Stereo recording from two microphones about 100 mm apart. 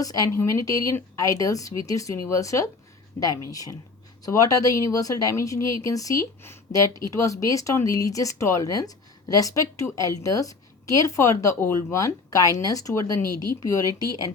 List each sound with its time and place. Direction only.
0.0 s speech: 35° left (ahead or behind)